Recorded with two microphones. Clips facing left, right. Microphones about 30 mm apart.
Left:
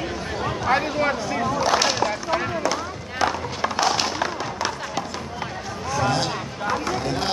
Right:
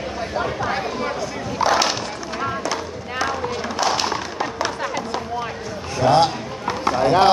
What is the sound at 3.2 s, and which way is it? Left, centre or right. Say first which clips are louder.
Fireworks: left 1 dB; centre.